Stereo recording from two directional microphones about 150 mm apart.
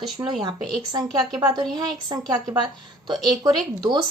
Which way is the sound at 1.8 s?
30° right (ahead or behind).